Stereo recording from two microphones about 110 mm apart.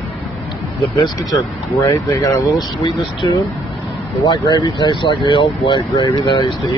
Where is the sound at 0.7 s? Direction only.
30° left (ahead or behind).